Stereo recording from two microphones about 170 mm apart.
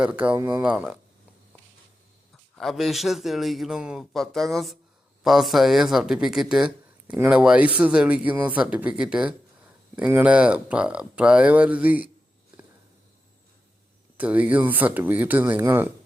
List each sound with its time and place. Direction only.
0.0 s speech: 10° right (ahead or behind)
0.3 s speech: 25° right (ahead or behind)
0.6 s speech: 5° right (ahead or behind)
2.6 s speech: centre (ahead or behind)
14.2 s speech: 10° right (ahead or behind)